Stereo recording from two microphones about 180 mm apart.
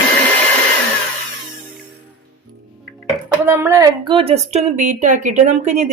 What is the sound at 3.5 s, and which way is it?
A woman's voice, 15° right (ahead or behind).